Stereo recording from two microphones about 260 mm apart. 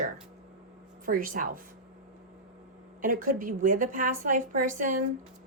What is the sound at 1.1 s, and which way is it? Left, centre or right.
Speech, right.